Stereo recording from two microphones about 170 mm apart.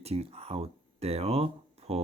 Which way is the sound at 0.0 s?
35° right (ahead or behind).